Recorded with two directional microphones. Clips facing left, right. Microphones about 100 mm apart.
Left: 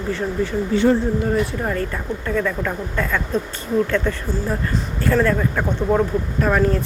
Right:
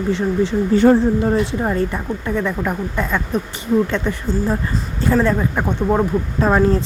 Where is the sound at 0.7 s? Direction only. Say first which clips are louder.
Right 4 dB; 45° right (ahead or behind).